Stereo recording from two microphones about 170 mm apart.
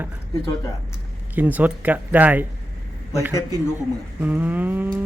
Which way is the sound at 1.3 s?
10° right (ahead or behind).